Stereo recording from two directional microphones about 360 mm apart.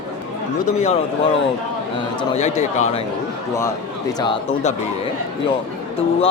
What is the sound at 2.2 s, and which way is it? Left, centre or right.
Speech, centre.